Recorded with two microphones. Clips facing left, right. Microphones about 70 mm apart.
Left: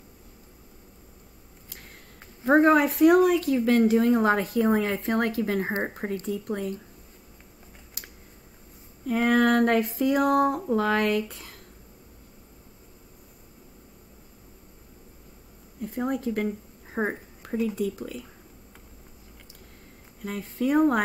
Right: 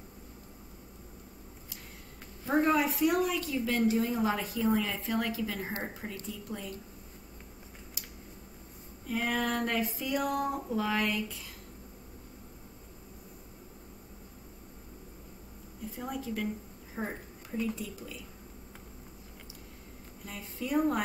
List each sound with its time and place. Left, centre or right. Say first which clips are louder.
2.4 s a woman's voice: left 8 dB; left
9.0 s a woman's voice: left 10 dB; left
15.8 s a woman's voice: left 10 dB; left
16.9 s a sound: left 9 dB; left
17.7 s a woman's voice: left 11 dB; left
20.2 s a woman's voice: left 10 dB; left